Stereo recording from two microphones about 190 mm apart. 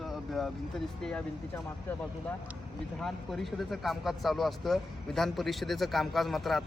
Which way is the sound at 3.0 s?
Centre (ahead or behind).